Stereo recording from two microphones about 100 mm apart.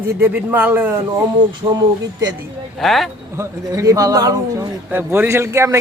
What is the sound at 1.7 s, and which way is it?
Speech, 40° right (ahead or behind).